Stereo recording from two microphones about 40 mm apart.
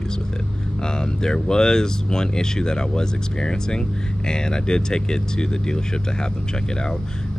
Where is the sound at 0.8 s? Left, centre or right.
Centre.